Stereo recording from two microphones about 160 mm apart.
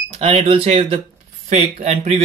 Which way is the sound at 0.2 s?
40° right (ahead or behind).